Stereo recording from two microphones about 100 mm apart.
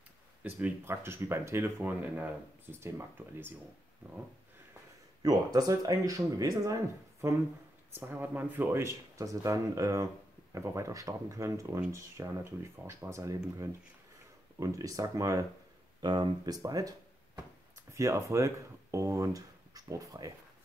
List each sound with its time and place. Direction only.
0.4 s speech: 15° right (ahead or behind)
5.2 s speech: 40° right (ahead or behind)
8.0 s speech: 20° right (ahead or behind)
16.0 s speech: 50° right (ahead or behind)
17.9 s speech: 30° right (ahead or behind)